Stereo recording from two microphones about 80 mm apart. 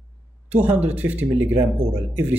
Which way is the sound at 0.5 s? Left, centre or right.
Centre.